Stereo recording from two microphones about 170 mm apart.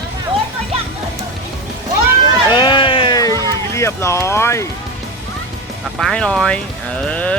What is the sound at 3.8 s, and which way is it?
Speech, 15° left (ahead or behind).